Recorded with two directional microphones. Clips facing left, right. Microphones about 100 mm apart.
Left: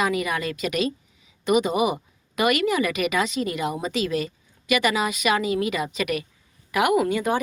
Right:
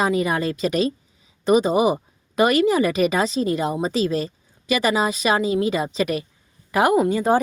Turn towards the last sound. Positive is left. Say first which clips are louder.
# right 4 dB
turn(degrees=-35)  # may be behind; listen again after turning